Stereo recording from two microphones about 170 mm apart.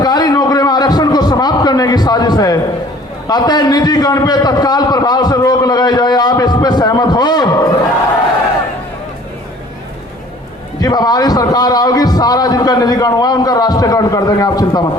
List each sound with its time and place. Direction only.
0.0 s a sound: 25° left (ahead or behind)
3.2 s a man's voice: 25° left (ahead or behind)
10.8 s a man's voice: 25° left (ahead or behind)